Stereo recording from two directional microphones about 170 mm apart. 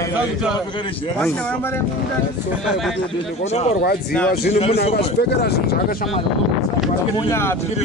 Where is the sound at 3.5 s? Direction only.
40° left (ahead or behind).